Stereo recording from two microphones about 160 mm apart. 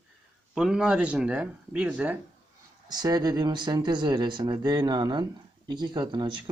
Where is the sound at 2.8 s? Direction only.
25° right (ahead or behind).